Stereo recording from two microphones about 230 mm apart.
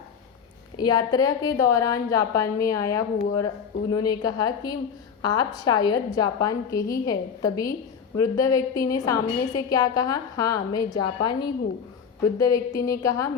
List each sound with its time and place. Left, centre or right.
0.8 s a woman's voice: centre